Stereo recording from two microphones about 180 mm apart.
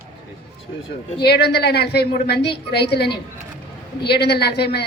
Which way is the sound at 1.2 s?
65° left (ahead or behind).